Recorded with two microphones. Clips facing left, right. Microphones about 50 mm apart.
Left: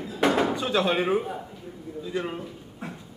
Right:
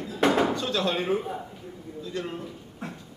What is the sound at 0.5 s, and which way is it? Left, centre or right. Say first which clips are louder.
Speech: left 3 dB; centre.